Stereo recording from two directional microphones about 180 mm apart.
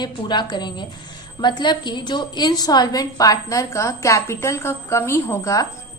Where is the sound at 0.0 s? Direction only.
25° left (ahead or behind).